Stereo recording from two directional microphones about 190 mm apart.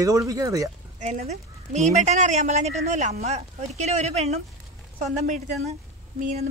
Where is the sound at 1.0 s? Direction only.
35° right (ahead or behind).